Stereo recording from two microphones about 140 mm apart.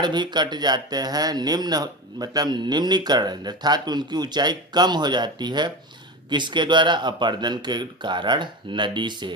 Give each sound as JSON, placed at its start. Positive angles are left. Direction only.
{"t": 0.0, "sound": "speech", "side_deg": -30}